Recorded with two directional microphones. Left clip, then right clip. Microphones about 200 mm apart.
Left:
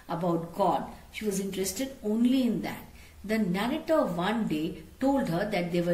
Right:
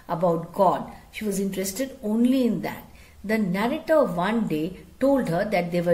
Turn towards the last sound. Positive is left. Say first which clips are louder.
# right 5 dB
turn(degrees=-55)  # may be behind; listen again after turning